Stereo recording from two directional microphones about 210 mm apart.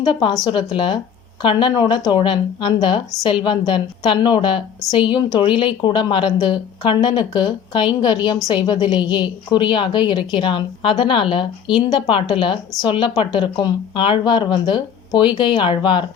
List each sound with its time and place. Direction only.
0.0 s a woman's voice: 20° left (ahead or behind)